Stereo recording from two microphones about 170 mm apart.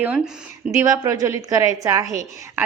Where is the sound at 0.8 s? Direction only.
20° right (ahead or behind).